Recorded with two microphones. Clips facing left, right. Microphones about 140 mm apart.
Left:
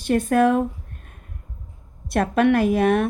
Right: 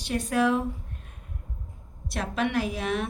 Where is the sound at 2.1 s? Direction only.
55° left (ahead or behind).